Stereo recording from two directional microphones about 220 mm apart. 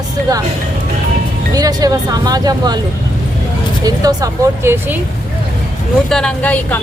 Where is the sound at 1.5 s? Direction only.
15° right (ahead or behind).